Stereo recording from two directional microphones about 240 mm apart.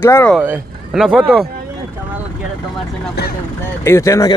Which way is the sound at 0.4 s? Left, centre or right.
Centre.